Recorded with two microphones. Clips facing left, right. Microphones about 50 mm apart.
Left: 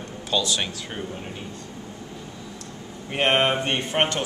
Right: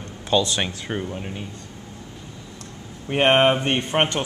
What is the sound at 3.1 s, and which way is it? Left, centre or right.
A man's voice, centre.